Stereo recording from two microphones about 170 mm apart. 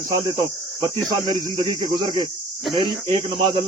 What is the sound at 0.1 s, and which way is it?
Speech, 25° right (ahead or behind).